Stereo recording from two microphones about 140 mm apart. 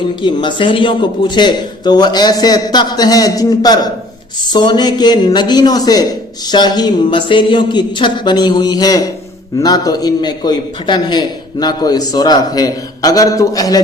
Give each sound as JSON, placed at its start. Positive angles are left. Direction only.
{"t": 0.2, "sound": "a man's voice", "side_deg": 35}